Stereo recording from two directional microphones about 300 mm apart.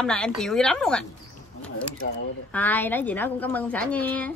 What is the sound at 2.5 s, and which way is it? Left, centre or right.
A woman's voice, centre.